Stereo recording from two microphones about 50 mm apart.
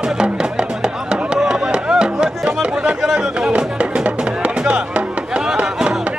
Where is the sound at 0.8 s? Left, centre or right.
Centre.